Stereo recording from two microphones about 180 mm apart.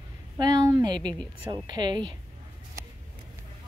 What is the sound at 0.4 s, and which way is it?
Speech, 20° right (ahead or behind).